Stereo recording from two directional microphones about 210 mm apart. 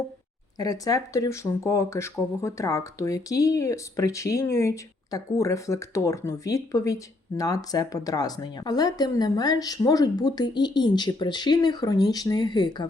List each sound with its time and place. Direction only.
0.6 s speech: 15° left (ahead or behind)